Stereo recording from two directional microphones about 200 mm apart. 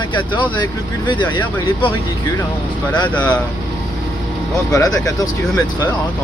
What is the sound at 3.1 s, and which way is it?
Speech, 5° left (ahead or behind).